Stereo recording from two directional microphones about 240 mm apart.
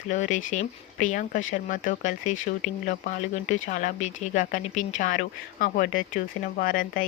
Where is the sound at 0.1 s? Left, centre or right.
Left.